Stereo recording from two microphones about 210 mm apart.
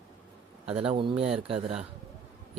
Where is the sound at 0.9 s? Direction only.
25° right (ahead or behind).